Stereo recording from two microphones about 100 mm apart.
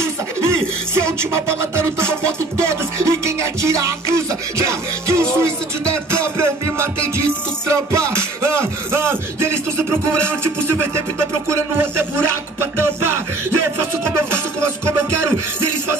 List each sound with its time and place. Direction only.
0.0 s music: 25° right (ahead or behind)
11.4 s music: 25° right (ahead or behind)
14.3 s music: 25° right (ahead or behind)